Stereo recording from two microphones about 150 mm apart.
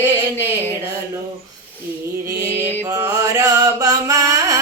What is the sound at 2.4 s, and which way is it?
Mantra, 20° right (ahead or behind).